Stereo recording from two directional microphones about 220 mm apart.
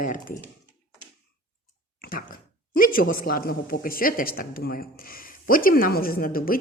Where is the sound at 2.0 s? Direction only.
40° left (ahead or behind).